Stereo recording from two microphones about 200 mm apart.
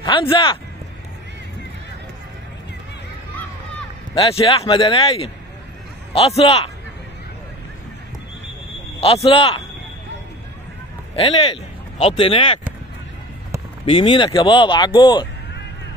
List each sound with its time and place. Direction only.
0.0 s speech: 25° left (ahead or behind)
4.1 s speech: 30° left (ahead or behind)
9.0 s speech: 30° left (ahead or behind)
11.1 s speech: 30° left (ahead or behind)
13.8 s speech: 25° left (ahead or behind)